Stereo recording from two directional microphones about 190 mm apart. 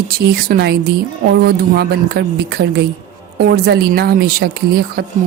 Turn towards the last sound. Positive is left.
turn(degrees=-55)  # may be behind; listen again after turning